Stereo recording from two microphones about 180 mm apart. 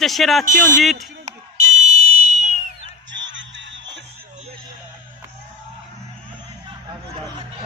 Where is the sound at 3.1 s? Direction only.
90° right.